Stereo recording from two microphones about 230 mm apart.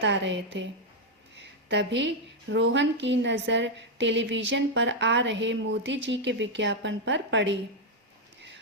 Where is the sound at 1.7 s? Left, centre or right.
Right.